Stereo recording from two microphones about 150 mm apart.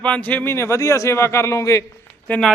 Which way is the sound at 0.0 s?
10° left (ahead or behind).